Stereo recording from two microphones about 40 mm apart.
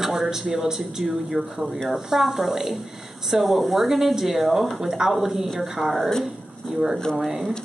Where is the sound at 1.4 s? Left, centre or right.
Left.